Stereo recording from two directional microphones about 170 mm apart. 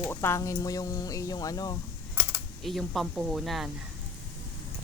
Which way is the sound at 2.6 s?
Centre (ahead or behind).